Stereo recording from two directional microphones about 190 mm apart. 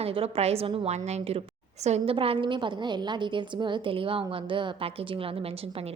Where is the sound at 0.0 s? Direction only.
30° right (ahead or behind).